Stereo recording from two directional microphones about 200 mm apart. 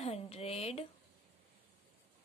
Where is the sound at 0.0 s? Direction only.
30° left (ahead or behind).